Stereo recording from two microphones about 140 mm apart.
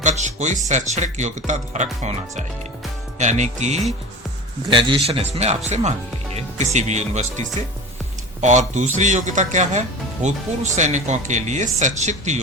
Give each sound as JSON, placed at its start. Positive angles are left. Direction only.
{"t": 0.0, "sound": "speech", "side_deg": -60}
{"t": 3.2, "sound": "speech", "side_deg": -60}
{"t": 4.7, "sound": "a man's voice", "side_deg": -35}
{"t": 5.0, "sound": "speech", "side_deg": -50}